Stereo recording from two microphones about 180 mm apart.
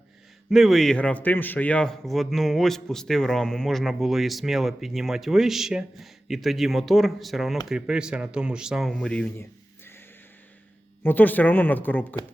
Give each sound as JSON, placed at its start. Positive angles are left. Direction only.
{"t": 0.5, "sound": "a man's voice", "side_deg": 0}
{"t": 11.0, "sound": "speech", "side_deg": 10}